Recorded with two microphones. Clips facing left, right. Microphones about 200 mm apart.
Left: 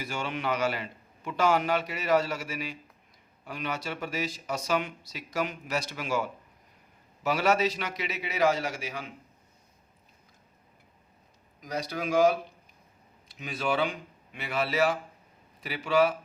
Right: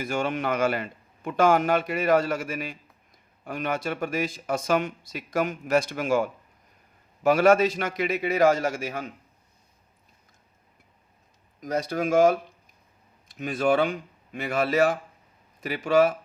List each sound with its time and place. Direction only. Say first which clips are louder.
0.0 s speech: right 6 dB; 50° right (ahead or behind)
11.6 s speech: right 6 dB; 50° right (ahead or behind)